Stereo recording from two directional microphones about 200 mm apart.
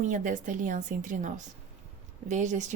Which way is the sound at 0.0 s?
40° right (ahead or behind).